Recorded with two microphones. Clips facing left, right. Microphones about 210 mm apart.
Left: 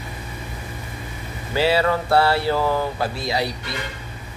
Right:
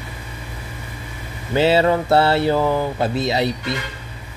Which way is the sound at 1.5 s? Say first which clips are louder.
Right 4 dB; 20° right (ahead or behind).